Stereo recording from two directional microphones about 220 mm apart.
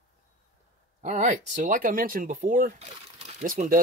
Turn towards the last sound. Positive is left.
turn(degrees=-35)  # may be behind; listen again after turning